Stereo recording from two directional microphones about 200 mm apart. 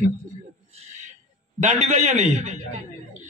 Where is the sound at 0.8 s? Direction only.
35° right (ahead or behind).